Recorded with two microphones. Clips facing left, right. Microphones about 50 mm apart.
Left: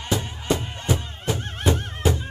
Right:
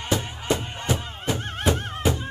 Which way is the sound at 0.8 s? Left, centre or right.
Centre.